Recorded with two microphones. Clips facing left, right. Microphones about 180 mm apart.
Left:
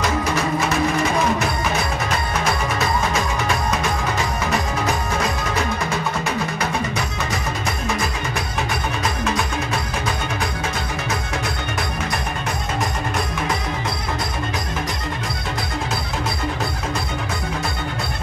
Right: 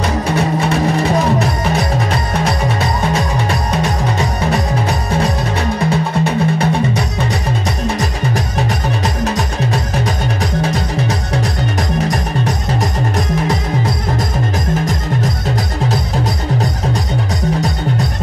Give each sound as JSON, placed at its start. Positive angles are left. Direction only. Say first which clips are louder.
{"t": 0.4, "sound": "music", "louder": "right 6 dB", "side_deg": -30}